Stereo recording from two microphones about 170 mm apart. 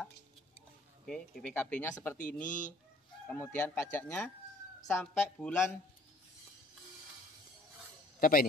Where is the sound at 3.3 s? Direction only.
10° left (ahead or behind).